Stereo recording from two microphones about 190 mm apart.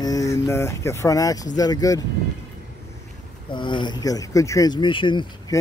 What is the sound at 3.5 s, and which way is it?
Speech, 25° left (ahead or behind).